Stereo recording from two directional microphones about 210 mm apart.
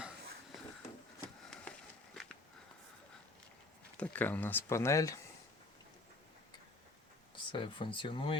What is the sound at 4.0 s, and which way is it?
Speech, 10° left (ahead or behind).